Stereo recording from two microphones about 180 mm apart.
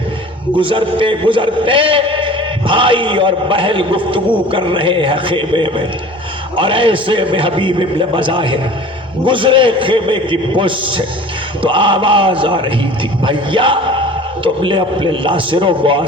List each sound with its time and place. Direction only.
0.5 s a man's voice: 30° right (ahead or behind)